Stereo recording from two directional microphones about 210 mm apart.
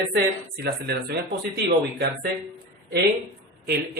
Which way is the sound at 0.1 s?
50° right (ahead or behind).